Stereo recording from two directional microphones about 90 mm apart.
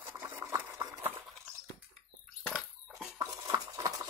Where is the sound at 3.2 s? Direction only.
45° right (ahead or behind).